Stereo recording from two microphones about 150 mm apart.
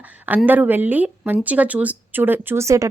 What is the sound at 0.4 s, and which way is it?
Speech, 10° right (ahead or behind).